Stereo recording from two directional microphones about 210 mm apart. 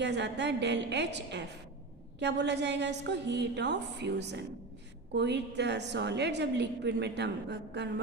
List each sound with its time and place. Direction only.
0.0 s a woman's voice: 55° right (ahead or behind)